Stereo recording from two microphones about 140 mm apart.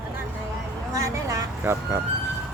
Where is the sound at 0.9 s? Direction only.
25° right (ahead or behind).